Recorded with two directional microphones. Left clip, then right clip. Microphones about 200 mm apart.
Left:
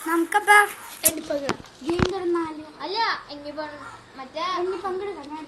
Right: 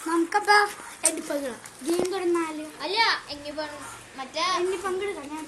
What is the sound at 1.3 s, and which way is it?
Speech, 55° right (ahead or behind).